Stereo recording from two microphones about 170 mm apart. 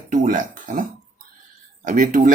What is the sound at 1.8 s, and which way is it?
Speech, 50° right (ahead or behind).